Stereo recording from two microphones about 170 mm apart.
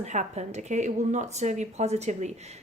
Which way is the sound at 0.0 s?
40° right (ahead or behind).